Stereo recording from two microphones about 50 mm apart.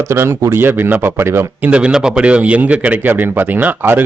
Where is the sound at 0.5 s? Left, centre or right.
Right.